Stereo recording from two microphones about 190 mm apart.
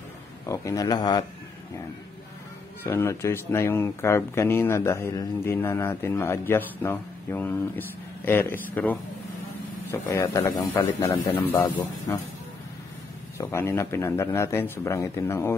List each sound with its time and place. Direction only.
0.5 s speech: 20° left (ahead or behind)
2.8 s speech: 10° left (ahead or behind)
13.4 s speech: 15° left (ahead or behind)